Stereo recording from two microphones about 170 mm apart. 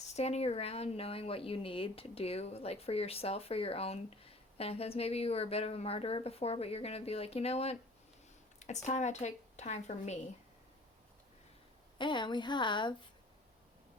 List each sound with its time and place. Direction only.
0.2 s speech: 40° left (ahead or behind)
11.9 s a woman's voice: 30° left (ahead or behind)